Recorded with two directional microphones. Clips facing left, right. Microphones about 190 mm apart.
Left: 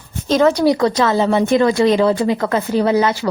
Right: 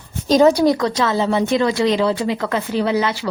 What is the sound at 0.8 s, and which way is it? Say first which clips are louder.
A woman's voice: left 3 dB; 45° left (ahead or behind).